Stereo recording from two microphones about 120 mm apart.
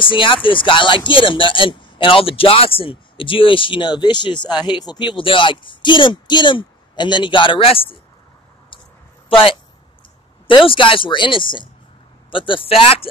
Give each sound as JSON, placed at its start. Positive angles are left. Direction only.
{"t": 0.0, "sound": "speech", "side_deg": 45}
{"t": 9.3, "sound": "speech", "side_deg": 45}